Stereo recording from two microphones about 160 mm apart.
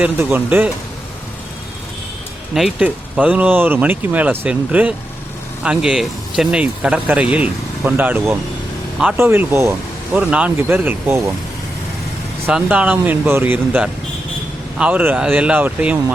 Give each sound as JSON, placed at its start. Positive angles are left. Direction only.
{"t": 0.0, "sound": "speech", "side_deg": -10}
{"t": 2.6, "sound": "speech", "side_deg": -5}
{"t": 12.5, "sound": "speech", "side_deg": -10}